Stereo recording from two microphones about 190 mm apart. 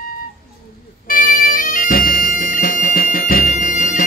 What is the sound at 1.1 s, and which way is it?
Bagpipes, 50° left (ahead or behind).